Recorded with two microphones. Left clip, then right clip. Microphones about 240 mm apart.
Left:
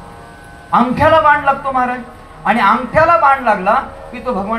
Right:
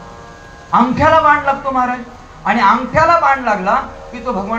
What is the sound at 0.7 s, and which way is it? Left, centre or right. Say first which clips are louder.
A woman's voice: even; left.